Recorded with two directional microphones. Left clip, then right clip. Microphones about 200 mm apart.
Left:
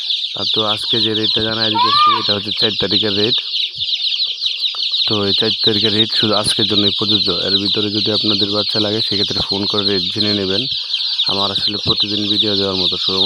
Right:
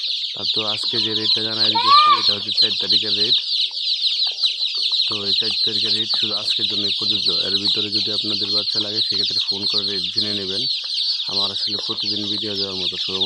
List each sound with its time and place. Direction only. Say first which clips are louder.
1.9 s speech: right 3 dB; 40° left (ahead or behind)
5.3 s speech: left 4 dB; 55° left (ahead or behind)